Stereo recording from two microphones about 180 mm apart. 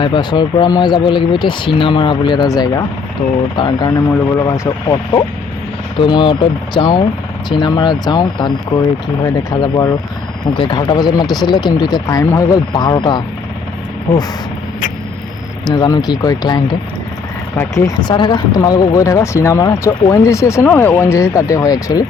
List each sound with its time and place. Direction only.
0.0 s speech: 25° left (ahead or behind)
15.6 s speech: 25° left (ahead or behind)
17.6 s speech: 20° left (ahead or behind)